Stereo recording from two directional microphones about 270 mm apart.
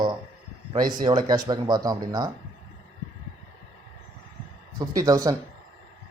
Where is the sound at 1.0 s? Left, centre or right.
Centre.